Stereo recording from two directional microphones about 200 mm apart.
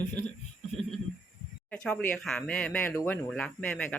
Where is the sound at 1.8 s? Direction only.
5° left (ahead or behind).